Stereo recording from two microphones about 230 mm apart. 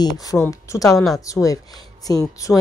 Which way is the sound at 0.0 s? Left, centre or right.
Centre.